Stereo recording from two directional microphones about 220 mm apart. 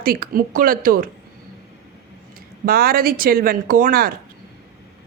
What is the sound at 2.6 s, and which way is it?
Speech, 40° right (ahead or behind).